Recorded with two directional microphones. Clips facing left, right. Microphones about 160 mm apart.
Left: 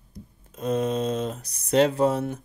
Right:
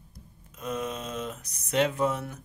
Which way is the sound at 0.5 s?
35° left (ahead or behind).